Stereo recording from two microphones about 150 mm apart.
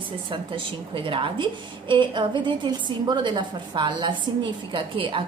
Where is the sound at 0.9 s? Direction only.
35° right (ahead or behind).